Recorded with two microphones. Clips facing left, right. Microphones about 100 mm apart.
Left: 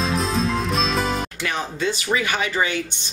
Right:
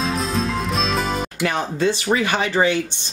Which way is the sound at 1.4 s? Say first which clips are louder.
Right 5 dB; 40° right (ahead or behind).